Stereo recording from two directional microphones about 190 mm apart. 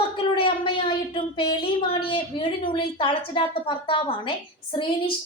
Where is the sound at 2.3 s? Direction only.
25° left (ahead or behind).